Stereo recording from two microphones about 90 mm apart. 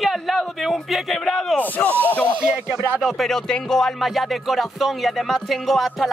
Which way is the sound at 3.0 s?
5° left (ahead or behind).